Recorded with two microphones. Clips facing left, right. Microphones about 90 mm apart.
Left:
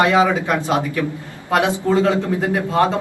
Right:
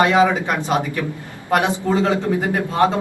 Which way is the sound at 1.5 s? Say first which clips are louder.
Left 1 dB; 15° right (ahead or behind).